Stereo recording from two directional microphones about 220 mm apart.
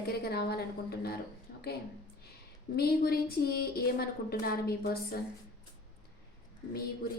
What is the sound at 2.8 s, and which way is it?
A woman's voice, 45° left (ahead or behind).